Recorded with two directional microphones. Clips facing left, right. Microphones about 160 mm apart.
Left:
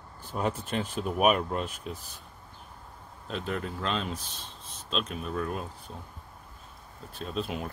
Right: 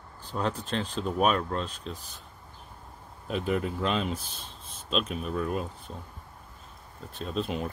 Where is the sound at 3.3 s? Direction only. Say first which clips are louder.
Right 5 dB; 5° right (ahead or behind).